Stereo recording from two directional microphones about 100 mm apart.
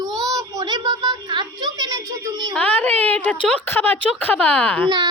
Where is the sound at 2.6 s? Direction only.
15° left (ahead or behind).